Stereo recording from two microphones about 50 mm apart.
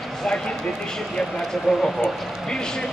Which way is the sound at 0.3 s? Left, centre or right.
Centre.